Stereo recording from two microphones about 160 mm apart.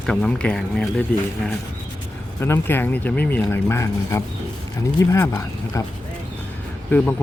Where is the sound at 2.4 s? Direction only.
15° left (ahead or behind).